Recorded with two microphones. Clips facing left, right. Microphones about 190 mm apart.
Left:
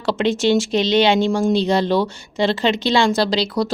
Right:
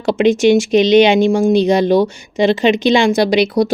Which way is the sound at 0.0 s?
15° right (ahead or behind).